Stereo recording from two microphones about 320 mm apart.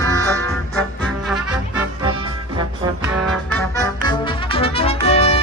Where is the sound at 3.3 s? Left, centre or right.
Centre.